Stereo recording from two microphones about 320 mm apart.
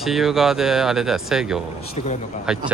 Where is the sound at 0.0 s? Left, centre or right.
Centre.